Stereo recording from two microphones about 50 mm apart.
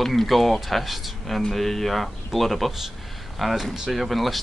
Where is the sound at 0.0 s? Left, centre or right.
Centre.